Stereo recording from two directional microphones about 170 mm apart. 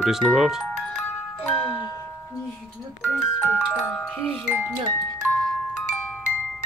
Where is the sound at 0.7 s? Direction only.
5° left (ahead or behind).